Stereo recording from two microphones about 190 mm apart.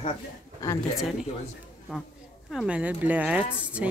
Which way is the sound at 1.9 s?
Centre (ahead or behind).